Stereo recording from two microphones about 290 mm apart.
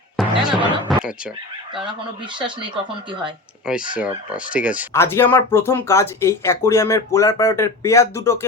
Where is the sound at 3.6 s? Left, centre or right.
Centre.